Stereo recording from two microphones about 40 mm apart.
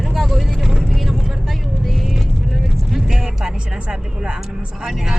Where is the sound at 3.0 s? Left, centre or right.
Centre.